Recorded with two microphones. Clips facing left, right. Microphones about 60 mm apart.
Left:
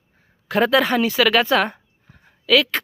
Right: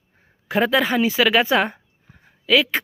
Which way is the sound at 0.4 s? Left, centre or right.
Centre.